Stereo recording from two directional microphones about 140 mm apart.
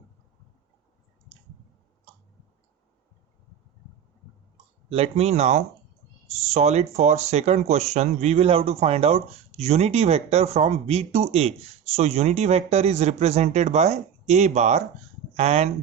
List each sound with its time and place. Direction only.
4.5 s speech: 45° right (ahead or behind)